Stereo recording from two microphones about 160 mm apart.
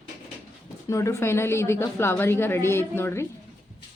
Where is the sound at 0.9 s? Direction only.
20° left (ahead or behind).